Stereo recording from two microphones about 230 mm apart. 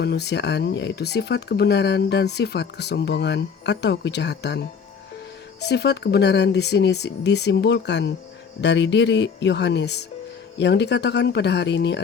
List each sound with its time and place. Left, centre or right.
0.0 s speech: left